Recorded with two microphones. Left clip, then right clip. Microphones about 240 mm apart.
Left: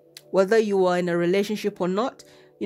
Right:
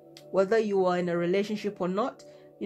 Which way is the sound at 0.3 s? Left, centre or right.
Left.